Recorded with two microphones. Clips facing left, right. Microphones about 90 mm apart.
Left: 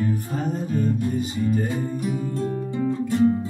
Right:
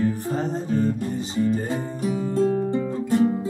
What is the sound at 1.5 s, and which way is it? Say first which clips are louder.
Music: left 1 dB; 30° right (ahead or behind).